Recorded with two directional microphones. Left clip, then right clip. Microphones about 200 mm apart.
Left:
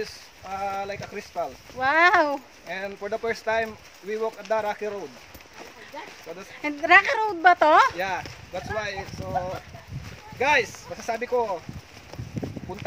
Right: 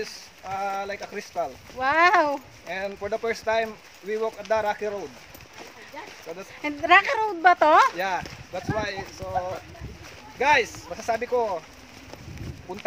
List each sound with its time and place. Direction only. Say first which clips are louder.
0.0 s speech: even; 15° right (ahead or behind)
1.8 s speech: even; 5° left (ahead or behind)
2.7 s speech: right 1 dB; 15° right (ahead or behind)
6.6 s speech: left 1 dB; 5° left (ahead or behind)
8.5 s speech: right 1 dB; 15° right (ahead or behind)
10.4 s speech: right 1 dB; 15° right (ahead or behind)